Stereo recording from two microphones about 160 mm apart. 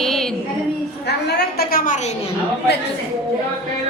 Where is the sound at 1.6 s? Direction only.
60° left (ahead or behind).